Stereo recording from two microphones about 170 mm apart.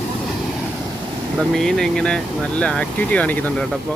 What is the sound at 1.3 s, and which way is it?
Speech, centre (ahead or behind).